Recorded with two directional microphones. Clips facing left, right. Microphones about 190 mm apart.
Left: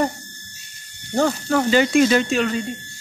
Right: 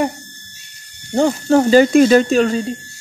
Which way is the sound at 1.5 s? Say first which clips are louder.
Right 8 dB; 35° right (ahead or behind).